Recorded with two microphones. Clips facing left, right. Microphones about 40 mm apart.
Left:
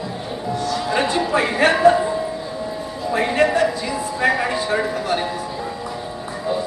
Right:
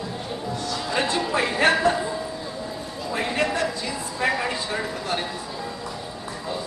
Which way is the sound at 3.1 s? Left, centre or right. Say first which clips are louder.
Left 7 dB; centre.